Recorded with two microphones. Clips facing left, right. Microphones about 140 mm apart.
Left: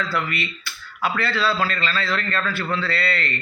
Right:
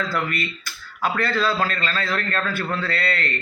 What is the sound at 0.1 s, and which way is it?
Speech, 45° right (ahead or behind).